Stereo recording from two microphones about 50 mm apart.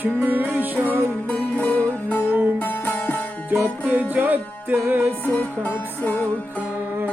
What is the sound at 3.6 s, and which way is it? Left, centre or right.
Music, right.